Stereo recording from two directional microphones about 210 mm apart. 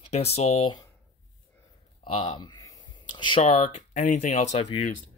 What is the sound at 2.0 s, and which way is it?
Speech, 25° left (ahead or behind).